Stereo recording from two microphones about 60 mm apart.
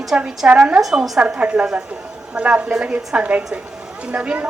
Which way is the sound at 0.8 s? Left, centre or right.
Centre.